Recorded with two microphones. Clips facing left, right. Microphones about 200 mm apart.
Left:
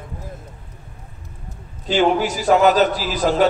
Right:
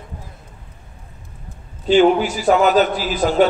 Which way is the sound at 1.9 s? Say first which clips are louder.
Right 4 dB; 40° left (ahead or behind).